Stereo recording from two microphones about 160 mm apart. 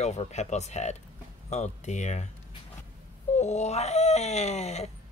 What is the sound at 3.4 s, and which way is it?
Speech, 45° left (ahead or behind).